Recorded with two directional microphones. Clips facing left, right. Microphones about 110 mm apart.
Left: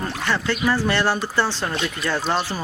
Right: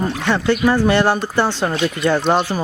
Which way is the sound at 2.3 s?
15° right (ahead or behind).